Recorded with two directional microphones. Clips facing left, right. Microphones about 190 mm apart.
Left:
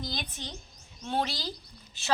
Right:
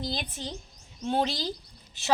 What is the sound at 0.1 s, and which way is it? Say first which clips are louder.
A woman's voice: right 4 dB; 30° right (ahead or behind).